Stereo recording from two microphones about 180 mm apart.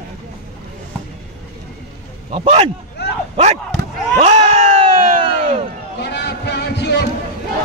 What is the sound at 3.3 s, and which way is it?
Speech, 35° right (ahead or behind).